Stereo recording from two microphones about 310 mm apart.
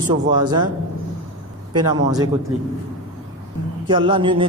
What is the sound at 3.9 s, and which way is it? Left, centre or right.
Speech, centre.